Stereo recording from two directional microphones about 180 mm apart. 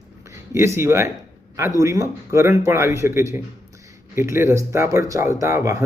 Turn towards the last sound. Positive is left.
turn(degrees=-15)  # may be behind; listen again after turning